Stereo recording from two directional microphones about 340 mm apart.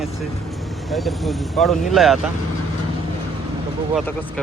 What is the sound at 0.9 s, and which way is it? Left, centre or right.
Speech, centre.